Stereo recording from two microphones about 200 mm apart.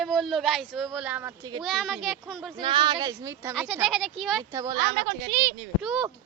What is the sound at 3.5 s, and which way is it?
Speech, centre (ahead or behind).